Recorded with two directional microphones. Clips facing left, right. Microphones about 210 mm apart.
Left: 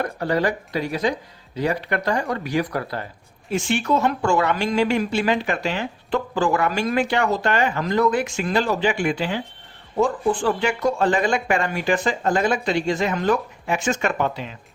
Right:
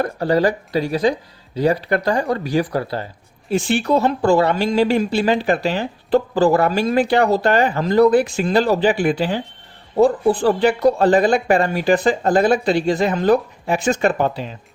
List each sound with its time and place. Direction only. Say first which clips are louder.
0.0 s speech: right 5 dB; 35° right (ahead or behind)